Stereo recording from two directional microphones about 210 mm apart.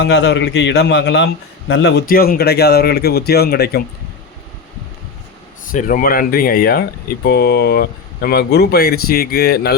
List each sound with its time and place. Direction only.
0.0 s a man's voice: 55° left (ahead or behind)
5.7 s a man's voice: 40° left (ahead or behind)